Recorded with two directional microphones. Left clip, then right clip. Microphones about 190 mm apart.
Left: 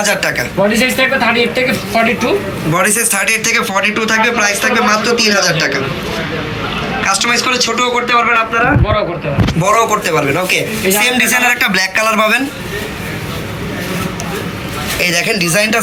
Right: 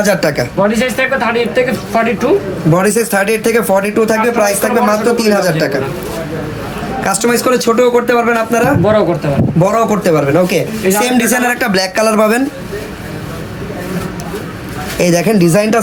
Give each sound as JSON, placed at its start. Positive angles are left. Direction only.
{"t": 0.0, "sound": "speech", "side_deg": -60}
{"t": 0.8, "sound": "speech", "side_deg": -5}
{"t": 2.7, "sound": "speech", "side_deg": -50}
{"t": 7.0, "sound": "a man's voice", "side_deg": -65}
{"t": 11.0, "sound": "speech", "side_deg": -45}
{"t": 14.9, "sound": "speech", "side_deg": -55}